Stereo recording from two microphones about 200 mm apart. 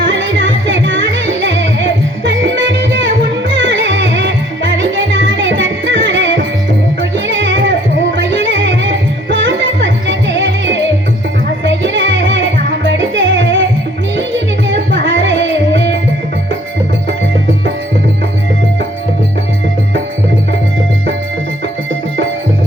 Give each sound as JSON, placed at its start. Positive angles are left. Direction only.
{"t": 0.0, "sound": "music", "side_deg": -65}